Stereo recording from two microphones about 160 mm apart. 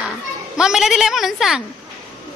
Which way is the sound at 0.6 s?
5° right (ahead or behind).